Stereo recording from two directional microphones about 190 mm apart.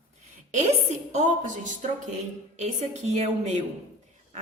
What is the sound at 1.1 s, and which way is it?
Speech, 35° right (ahead or behind).